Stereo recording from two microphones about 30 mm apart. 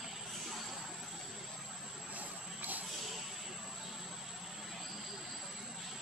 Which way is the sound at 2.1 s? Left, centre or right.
Right.